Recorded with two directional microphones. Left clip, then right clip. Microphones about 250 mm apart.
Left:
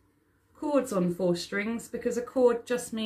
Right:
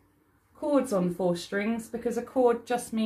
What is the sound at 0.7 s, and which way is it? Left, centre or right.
Speech, centre.